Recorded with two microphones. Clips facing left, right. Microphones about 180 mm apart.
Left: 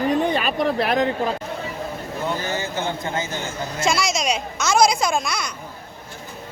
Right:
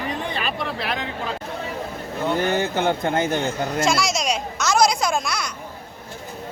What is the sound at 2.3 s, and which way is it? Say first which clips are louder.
Speech: right 5 dB; 60° right (ahead or behind).